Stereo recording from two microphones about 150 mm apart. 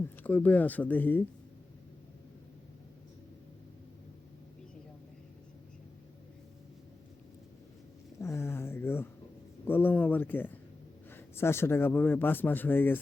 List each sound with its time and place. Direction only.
0.0 s speech: 10° left (ahead or behind)
8.2 s a sound: 20° left (ahead or behind)
9.6 s speech: 15° left (ahead or behind)